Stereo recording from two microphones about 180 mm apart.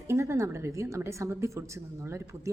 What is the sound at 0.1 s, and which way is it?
Speech, 15° right (ahead or behind).